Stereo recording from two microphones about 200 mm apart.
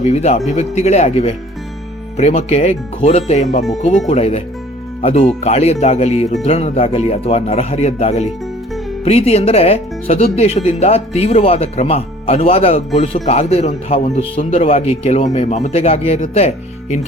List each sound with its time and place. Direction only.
0.0 s speech: 30° left (ahead or behind)